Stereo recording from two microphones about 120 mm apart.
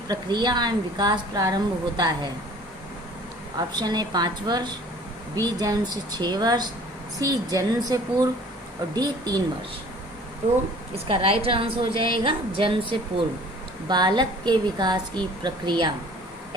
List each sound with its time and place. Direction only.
0.1 s a woman's voice: 35° right (ahead or behind)
3.8 s a woman's voice: 35° right (ahead or behind)
10.4 s a woman's voice: 55° right (ahead or behind)
13.8 s a woman's voice: 35° right (ahead or behind)